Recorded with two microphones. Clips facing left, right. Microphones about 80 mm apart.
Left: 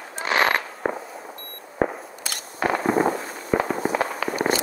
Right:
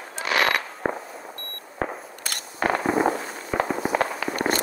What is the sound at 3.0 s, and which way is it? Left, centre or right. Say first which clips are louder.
Firecracker: even; left.